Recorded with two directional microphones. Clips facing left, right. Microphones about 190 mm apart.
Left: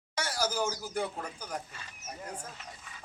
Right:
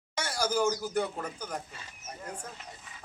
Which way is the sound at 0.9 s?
10° left (ahead or behind).